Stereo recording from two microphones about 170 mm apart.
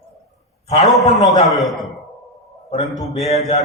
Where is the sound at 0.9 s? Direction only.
Centre (ahead or behind).